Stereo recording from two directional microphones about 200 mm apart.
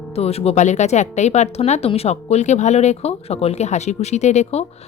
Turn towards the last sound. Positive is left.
turn(degrees=35)  # may be behind; listen again after turning